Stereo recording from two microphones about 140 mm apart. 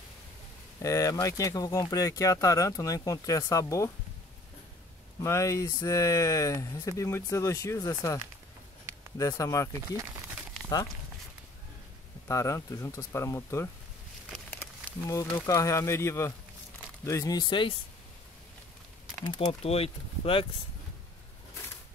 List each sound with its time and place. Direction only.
0.8 s speech: 25° left (ahead or behind)
5.2 s speech: 20° left (ahead or behind)
9.2 s speech: 20° left (ahead or behind)
9.8 s speech: 20° right (ahead or behind)
12.3 s speech: 20° left (ahead or behind)
14.3 s a sound: 10° left (ahead or behind)
15.4 s speech: 25° left (ahead or behind)
19.6 s speech: 45° left (ahead or behind)